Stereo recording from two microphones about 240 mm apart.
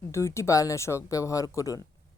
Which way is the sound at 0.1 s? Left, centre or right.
Centre.